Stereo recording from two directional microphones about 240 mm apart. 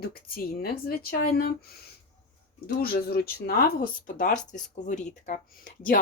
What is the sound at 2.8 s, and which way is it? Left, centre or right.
Speech, left.